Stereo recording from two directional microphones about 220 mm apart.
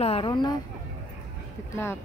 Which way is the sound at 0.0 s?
25° left (ahead or behind).